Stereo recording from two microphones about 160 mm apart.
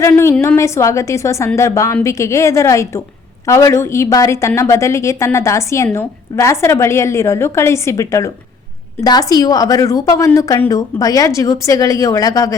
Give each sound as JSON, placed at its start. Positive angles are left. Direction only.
{"t": 0.0, "sound": "a woman's voice", "side_deg": 15}